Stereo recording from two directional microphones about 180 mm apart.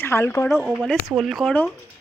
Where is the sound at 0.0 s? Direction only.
15° left (ahead or behind).